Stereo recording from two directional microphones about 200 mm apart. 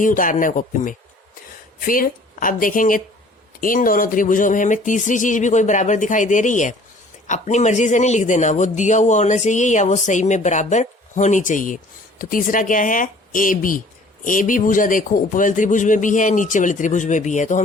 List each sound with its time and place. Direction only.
0.0 s speech: 40° left (ahead or behind)